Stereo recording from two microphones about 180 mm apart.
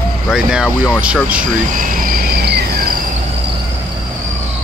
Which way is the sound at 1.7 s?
50° right (ahead or behind).